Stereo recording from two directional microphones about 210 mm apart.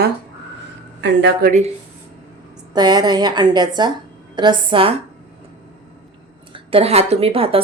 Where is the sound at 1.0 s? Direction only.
50° right (ahead or behind).